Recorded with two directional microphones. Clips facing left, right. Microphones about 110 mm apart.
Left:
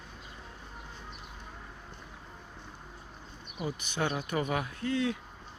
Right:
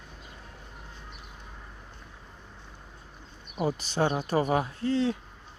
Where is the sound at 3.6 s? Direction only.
35° right (ahead or behind).